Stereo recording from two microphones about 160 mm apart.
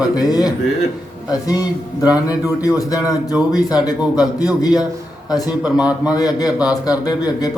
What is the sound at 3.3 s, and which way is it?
Speech, 10° right (ahead or behind).